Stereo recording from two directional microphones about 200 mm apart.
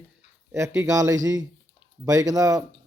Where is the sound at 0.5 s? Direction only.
15° right (ahead or behind).